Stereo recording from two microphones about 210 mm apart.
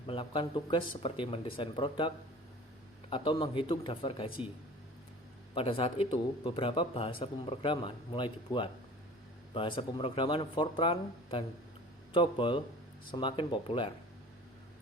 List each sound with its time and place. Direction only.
0.1 s speech: 25° left (ahead or behind)
5.5 s speech: 25° left (ahead or behind)